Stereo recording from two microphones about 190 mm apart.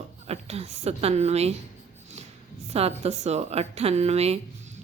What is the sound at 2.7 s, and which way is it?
A woman's voice, 35° right (ahead or behind).